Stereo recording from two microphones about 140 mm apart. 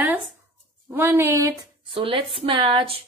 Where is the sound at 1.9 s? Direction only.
40° right (ahead or behind).